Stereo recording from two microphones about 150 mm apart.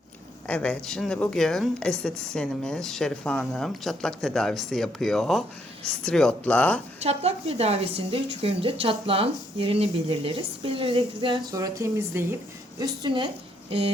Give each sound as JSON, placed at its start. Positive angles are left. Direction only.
{"t": 0.4, "sound": "speech", "side_deg": 10}
{"t": 7.0, "sound": "a woman's voice", "side_deg": -45}
{"t": 11.5, "sound": "speech", "side_deg": -20}
{"t": 12.8, "sound": "a woman's voice", "side_deg": -30}